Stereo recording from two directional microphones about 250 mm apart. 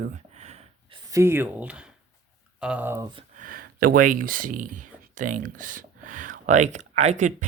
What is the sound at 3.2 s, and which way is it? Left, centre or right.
Speech, right.